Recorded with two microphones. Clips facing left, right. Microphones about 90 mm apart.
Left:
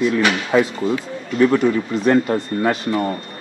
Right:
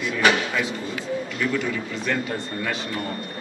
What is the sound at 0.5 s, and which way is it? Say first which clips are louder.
Speech: left 10 dB; 45° left (ahead or behind).